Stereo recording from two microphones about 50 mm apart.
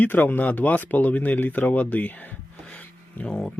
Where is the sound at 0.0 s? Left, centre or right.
Left.